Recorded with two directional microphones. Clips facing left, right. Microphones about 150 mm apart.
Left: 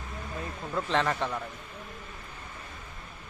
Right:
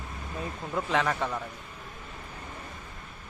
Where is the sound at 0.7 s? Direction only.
5° right (ahead or behind).